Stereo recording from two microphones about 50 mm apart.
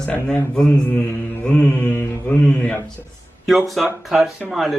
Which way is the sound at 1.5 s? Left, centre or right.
Left.